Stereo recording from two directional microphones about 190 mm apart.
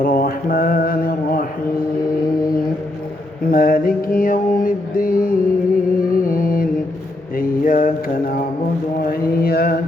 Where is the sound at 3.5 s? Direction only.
50° left (ahead or behind).